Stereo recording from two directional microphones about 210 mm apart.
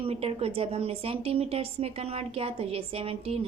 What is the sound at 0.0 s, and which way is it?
A woman's voice, 30° right (ahead or behind).